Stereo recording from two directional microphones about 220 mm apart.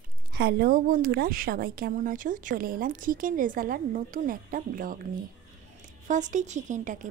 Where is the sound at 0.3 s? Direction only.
45° right (ahead or behind).